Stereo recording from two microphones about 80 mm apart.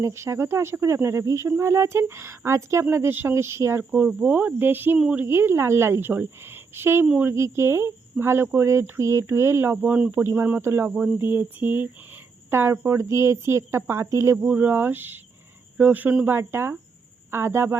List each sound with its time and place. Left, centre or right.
0.0 s speech: right
3.9 s speech: centre
9.8 s speech: centre
10.1 s speech: right
14.4 s speech: centre
16.2 s speech: right